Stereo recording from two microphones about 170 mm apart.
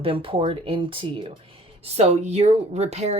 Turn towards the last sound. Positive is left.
turn(degrees=-40)  # may be behind; listen again after turning